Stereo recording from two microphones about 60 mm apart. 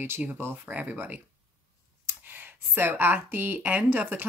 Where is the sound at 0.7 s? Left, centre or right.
Right.